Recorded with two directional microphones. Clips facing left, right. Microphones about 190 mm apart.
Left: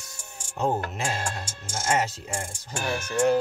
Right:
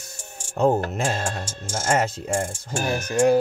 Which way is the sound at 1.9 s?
50° right (ahead or behind).